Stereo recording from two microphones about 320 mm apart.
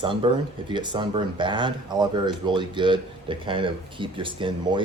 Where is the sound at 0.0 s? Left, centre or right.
Centre.